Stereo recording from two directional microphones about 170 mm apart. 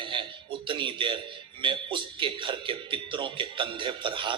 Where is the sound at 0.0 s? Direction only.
30° right (ahead or behind).